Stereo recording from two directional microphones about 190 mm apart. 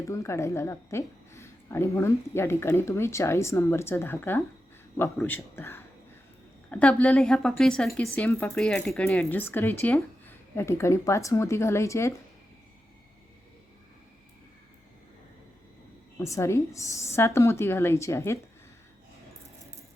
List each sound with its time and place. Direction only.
0.1 s a woman's voice: 15° left (ahead or behind)
16.1 s a woman's voice: 15° left (ahead or behind)